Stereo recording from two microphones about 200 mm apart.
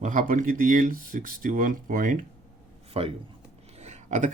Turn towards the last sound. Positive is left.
turn(degrees=-40)  # may be behind; listen again after turning